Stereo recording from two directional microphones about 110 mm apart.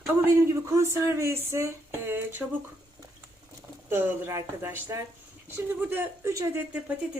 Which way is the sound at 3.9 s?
20° right (ahead or behind).